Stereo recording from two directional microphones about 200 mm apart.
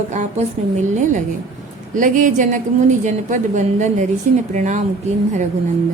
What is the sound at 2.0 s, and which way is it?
A woman's voice, 40° right (ahead or behind).